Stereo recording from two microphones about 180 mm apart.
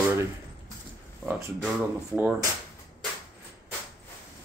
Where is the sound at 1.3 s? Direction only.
10° right (ahead or behind).